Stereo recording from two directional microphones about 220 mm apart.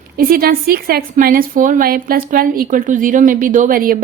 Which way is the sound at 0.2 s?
40° right (ahead or behind).